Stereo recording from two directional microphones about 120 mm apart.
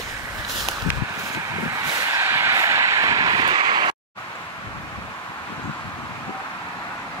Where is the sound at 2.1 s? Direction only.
20° right (ahead or behind); by 4.0 s 40° right (ahead or behind).